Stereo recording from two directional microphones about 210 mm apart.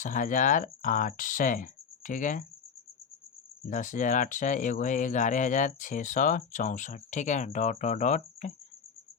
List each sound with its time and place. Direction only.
0.0 s speech: 40° left (ahead or behind)
3.7 s speech: 35° left (ahead or behind)